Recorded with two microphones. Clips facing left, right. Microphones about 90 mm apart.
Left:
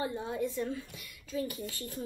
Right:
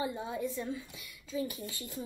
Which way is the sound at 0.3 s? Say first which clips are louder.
Left 2 dB; 20° right (ahead or behind).